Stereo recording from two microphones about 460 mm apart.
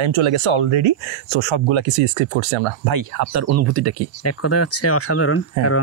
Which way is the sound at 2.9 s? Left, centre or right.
Right.